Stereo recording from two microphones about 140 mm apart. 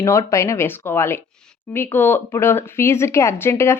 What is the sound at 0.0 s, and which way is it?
Speech, 20° left (ahead or behind).